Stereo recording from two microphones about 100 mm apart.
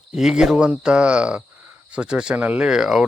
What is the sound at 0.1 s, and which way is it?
Speech, 5° right (ahead or behind).